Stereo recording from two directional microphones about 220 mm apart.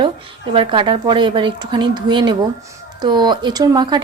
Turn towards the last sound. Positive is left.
turn(degrees=-20)  # may be behind; listen again after turning